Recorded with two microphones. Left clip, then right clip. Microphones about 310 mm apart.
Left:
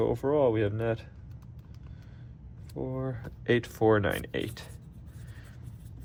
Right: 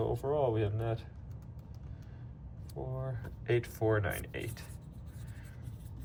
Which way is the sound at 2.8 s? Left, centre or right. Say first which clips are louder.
Left 7 dB; left.